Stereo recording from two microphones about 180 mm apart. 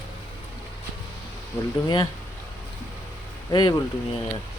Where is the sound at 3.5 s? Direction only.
25° left (ahead or behind).